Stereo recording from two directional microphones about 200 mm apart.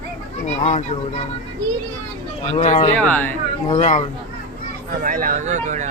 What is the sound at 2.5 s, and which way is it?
Speech, 35° left (ahead or behind).